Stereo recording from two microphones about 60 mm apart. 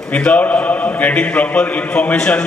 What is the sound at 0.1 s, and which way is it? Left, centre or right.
A man's voice, left.